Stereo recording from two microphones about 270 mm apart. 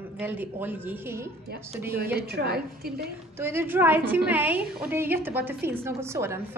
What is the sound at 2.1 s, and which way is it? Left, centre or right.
Speech, right.